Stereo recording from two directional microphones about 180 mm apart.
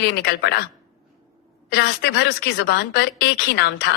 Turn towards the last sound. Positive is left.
turn(degrees=70)  # may be behind; listen again after turning